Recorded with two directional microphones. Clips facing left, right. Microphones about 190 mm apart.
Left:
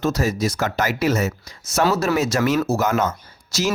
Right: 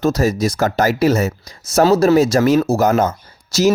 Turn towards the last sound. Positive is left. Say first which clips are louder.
# right 7 dB
turn(degrees=-35)  # may be behind; listen again after turning